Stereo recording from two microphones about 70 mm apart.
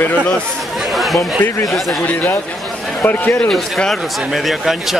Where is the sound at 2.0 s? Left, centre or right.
Left.